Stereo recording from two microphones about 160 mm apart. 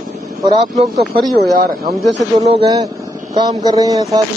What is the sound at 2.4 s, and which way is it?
A man's voice, 30° right (ahead or behind).